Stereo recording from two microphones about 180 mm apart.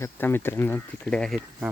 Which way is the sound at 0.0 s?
10° left (ahead or behind).